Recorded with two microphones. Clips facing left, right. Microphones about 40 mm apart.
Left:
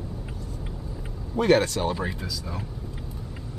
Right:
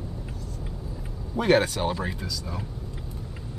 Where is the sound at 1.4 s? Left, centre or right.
Centre.